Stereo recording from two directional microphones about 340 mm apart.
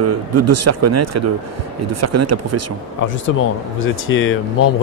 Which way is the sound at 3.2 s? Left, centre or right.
Left.